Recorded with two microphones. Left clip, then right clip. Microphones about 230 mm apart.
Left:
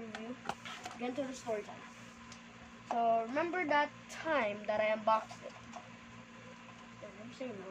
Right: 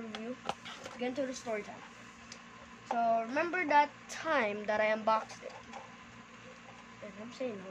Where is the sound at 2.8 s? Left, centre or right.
Right.